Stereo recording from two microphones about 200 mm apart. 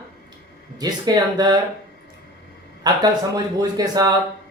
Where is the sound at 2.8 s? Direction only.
20° right (ahead or behind).